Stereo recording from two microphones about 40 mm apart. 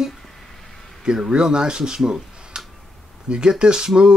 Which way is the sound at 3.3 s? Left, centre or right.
Right.